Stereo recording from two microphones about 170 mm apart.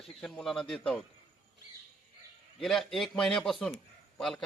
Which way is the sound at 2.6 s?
Centre (ahead or behind).